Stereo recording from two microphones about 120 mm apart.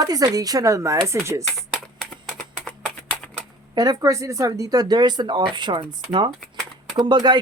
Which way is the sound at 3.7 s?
30° right (ahead or behind).